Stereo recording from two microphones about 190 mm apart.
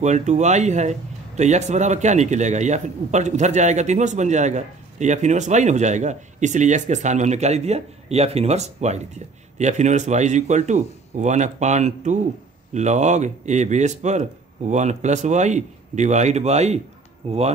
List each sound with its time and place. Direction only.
0.0 s speech: 40° right (ahead or behind)